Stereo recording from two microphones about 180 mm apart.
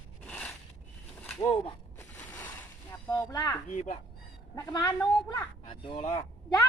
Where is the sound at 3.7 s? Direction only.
40° left (ahead or behind).